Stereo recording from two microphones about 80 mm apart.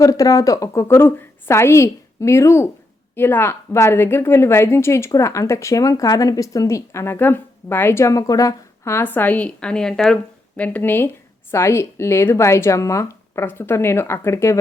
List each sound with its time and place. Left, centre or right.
0.0 s a woman's voice: left
9.0 s a woman's voice: left
10.6 s a woman's voice: left